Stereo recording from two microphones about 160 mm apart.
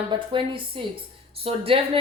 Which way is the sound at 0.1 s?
30° right (ahead or behind).